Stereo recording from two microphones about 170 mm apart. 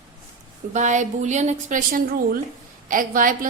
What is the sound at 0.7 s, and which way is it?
A woman's voice, 45° right (ahead or behind).